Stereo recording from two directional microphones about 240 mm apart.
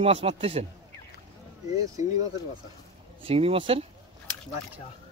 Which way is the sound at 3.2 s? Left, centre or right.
Right.